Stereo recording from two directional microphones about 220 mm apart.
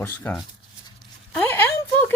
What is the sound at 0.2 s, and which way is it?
Speech, 10° left (ahead or behind).